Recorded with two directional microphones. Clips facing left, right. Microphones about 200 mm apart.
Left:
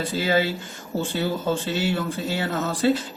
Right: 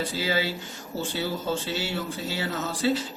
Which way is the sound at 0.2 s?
55° left (ahead or behind).